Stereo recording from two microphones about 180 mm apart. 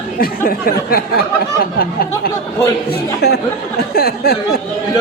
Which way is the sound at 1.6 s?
55° left (ahead or behind).